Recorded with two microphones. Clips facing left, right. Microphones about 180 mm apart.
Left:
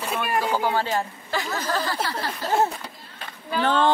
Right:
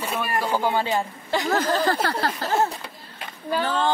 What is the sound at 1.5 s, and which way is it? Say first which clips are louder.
Speech: right 7 dB; 55° right (ahead or behind).